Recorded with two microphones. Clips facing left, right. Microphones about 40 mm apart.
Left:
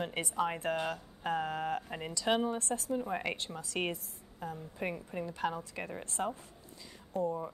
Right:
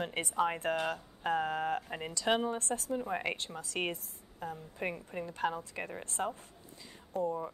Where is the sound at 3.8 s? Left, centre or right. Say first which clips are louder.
Even; right.